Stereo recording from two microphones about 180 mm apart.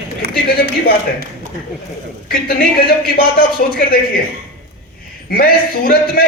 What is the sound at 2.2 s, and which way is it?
A woman's voice, 55° left (ahead or behind).